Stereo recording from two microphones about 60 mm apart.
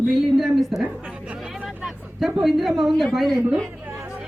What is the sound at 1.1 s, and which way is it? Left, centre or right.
Chatter, centre.